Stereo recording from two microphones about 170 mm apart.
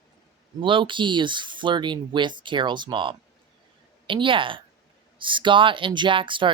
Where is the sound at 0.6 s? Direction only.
30° right (ahead or behind).